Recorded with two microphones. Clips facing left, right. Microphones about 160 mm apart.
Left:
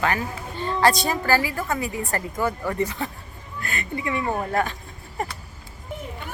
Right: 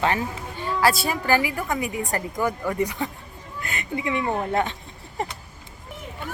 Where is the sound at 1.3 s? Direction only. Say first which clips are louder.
Right 1 dB; 15° right (ahead or behind).